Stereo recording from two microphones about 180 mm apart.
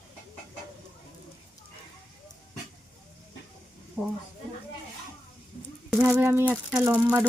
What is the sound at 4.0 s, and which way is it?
Speech, centre (ahead or behind).